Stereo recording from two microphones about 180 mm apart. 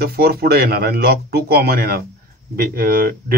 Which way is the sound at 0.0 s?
55° right (ahead or behind).